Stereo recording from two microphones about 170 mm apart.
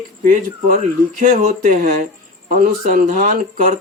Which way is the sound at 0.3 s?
50° right (ahead or behind).